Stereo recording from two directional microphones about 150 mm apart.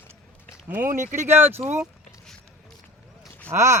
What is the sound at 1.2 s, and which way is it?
Speech, 15° right (ahead or behind).